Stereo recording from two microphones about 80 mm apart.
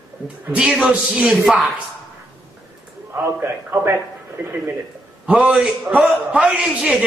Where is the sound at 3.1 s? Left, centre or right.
Right.